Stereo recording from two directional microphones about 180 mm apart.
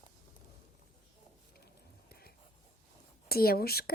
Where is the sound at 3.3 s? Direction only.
55° left (ahead or behind).